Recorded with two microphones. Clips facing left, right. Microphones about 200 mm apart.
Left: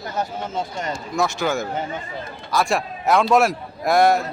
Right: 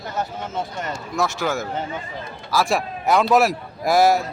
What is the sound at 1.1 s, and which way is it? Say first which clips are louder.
A man's voice: left 1 dB; 5° right (ahead or behind).